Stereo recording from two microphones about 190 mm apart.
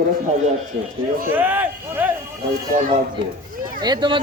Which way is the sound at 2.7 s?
45° right (ahead or behind).